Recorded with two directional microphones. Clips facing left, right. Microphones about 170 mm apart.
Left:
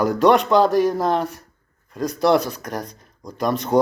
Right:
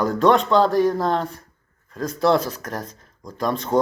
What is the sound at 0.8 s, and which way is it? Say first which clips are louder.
Speech: even; centre (ahead or behind).